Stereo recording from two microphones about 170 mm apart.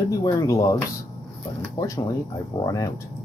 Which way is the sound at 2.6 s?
20° left (ahead or behind).